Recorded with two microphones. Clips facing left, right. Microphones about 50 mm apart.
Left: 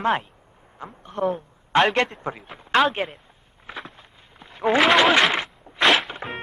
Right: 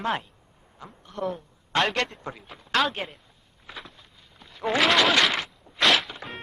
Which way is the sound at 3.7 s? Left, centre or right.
Left.